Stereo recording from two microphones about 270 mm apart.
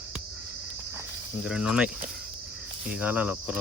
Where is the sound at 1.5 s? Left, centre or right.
Centre.